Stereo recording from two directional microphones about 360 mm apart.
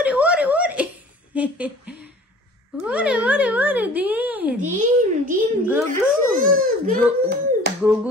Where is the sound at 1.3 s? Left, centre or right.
Centre.